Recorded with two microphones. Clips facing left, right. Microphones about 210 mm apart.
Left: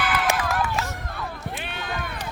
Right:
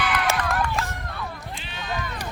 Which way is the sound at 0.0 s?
Centre (ahead or behind).